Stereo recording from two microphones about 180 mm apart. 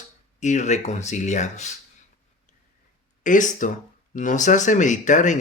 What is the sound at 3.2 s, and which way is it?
Speech, 45° left (ahead or behind).